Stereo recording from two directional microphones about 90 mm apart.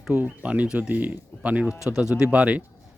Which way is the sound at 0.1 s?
20° right (ahead or behind).